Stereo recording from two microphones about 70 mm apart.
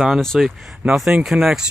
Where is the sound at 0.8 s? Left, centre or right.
Right.